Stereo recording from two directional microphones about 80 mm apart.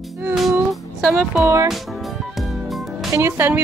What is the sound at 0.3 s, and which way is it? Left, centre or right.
Music, centre.